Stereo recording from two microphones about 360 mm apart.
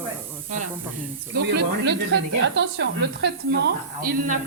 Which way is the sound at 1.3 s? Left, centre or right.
Right.